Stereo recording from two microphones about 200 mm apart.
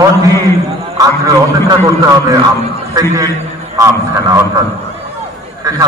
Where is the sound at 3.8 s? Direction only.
15° right (ahead or behind).